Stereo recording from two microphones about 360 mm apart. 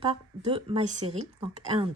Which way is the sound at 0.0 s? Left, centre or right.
Centre.